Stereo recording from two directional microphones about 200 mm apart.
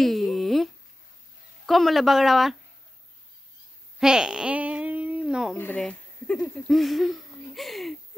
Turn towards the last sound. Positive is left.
turn(degrees=0)  # may be behind; listen again after turning